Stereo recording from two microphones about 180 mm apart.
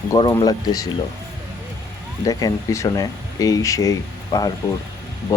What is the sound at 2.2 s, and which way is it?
Speech, 20° left (ahead or behind).